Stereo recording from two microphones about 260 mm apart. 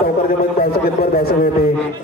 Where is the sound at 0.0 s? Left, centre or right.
Left.